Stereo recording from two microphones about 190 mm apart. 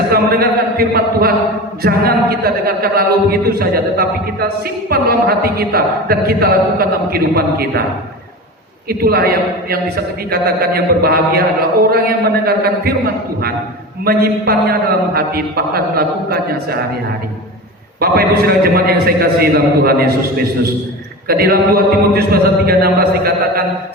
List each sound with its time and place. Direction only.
0.1 s a sound: 55° right (ahead or behind)
1.8 s a man's voice: 50° right (ahead or behind)
8.9 s a man's voice: 55° right (ahead or behind)
14.0 s a man's voice: 50° right (ahead or behind)
18.0 s a man's voice: 55° right (ahead or behind)
21.2 s a man's voice: 55° right (ahead or behind)